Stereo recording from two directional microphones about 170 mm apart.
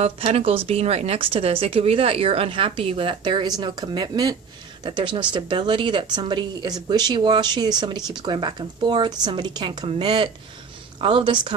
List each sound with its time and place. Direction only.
0.0 s a woman's voice: 35° right (ahead or behind)